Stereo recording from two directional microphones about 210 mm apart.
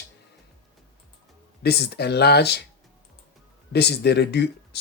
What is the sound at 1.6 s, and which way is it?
Speech, 50° left (ahead or behind).